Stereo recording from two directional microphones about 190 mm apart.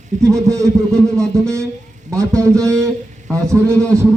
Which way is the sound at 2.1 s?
15° right (ahead or behind).